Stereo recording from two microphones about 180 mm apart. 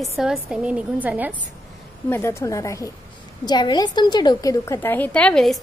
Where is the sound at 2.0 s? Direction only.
15° left (ahead or behind).